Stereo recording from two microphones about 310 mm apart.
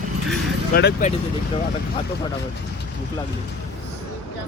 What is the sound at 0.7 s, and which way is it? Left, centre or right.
Speech, left.